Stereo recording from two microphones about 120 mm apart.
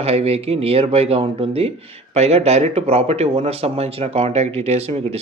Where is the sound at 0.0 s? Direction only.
55° right (ahead or behind).